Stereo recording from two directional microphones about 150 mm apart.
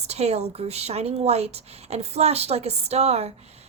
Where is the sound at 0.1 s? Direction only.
45° right (ahead or behind).